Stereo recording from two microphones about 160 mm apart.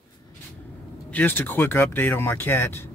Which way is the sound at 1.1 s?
10° left (ahead or behind).